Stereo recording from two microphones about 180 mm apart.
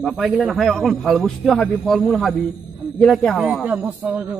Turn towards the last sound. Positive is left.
turn(degrees=-10)  # may be behind; listen again after turning